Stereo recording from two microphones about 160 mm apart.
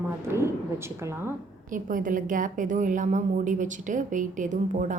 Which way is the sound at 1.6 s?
55° right (ahead or behind).